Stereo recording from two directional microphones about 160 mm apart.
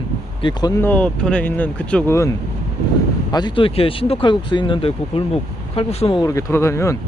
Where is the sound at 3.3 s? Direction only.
30° left (ahead or behind).